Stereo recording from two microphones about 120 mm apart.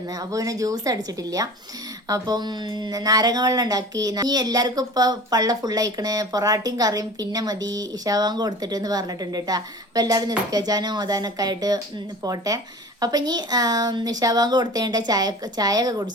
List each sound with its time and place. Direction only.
0.1 s speech: 30° right (ahead or behind)